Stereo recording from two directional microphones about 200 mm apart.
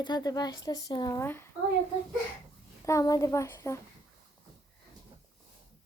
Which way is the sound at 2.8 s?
15° left (ahead or behind).